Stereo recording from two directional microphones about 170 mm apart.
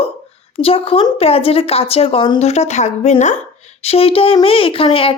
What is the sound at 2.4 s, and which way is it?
A woman's voice, 40° left (ahead or behind).